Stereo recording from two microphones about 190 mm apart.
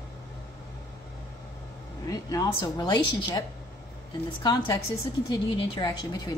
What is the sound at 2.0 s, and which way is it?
Speech, 20° left (ahead or behind).